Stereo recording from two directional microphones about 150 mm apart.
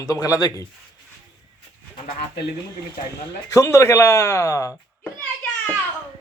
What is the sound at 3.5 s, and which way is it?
Speech, 20° left (ahead or behind).